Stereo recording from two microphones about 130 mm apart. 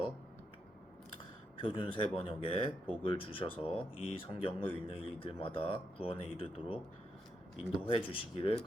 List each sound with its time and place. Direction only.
1.6 s speech: 40° left (ahead or behind)
7.9 s speech: 45° left (ahead or behind)